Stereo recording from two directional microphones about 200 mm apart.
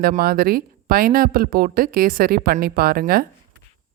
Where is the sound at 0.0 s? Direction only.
50° right (ahead or behind).